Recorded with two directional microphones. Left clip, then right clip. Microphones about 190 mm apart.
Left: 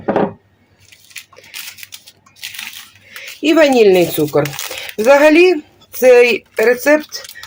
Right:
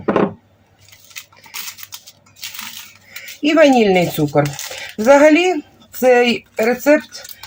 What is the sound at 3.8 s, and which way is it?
Speech, 60° left (ahead or behind).